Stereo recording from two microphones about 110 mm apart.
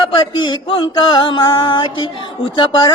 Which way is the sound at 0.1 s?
50° left (ahead or behind).